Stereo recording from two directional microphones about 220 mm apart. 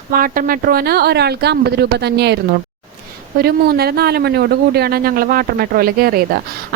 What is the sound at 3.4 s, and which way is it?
Speech, 45° right (ahead or behind).